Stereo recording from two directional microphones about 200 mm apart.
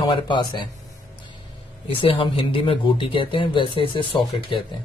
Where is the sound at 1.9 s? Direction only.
25° left (ahead or behind).